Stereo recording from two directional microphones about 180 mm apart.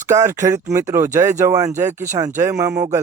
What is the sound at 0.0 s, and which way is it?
Speech, 15° right (ahead or behind).